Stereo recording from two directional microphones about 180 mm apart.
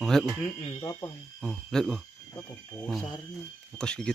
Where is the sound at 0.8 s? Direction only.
15° left (ahead or behind).